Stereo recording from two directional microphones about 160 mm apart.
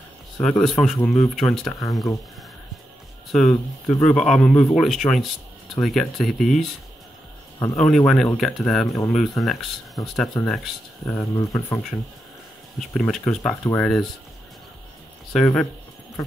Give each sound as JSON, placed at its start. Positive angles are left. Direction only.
{"t": 0.4, "sound": "speech", "side_deg": 5}
{"t": 3.3, "sound": "speech", "side_deg": 0}
{"t": 7.7, "sound": "speech", "side_deg": 5}
{"t": 11.1, "sound": "speech", "side_deg": 20}
{"t": 12.7, "sound": "speech", "side_deg": 5}
{"t": 15.3, "sound": "speech", "side_deg": 5}